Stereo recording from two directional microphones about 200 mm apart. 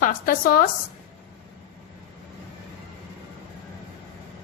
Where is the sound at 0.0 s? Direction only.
45° left (ahead or behind).